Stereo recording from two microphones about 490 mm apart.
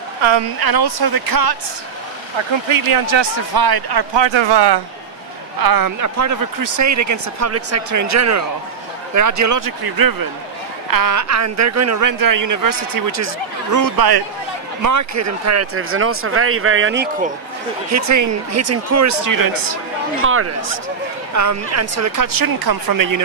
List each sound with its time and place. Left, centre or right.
0.2 s speech: right
0.6 s speech: right
2.3 s speech: right
3.2 s speech: right
5.6 s speech: right
14.8 s speech: right; by 17.3 s centre
17.8 s speech: right
20.2 s speech: right